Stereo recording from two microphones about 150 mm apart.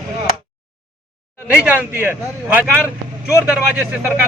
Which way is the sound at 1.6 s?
10° right (ahead or behind).